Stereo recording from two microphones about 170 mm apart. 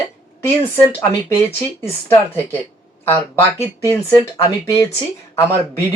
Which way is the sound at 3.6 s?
20° left (ahead or behind).